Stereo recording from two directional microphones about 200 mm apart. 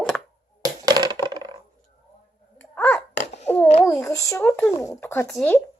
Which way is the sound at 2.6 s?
10° left (ahead or behind).